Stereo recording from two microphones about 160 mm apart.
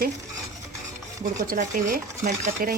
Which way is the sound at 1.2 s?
55° right (ahead or behind).